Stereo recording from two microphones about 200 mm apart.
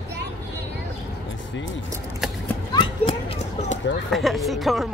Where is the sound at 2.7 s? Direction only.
25° left (ahead or behind).